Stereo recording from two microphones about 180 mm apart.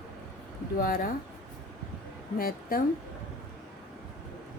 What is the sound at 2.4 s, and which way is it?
Speech, 55° left (ahead or behind).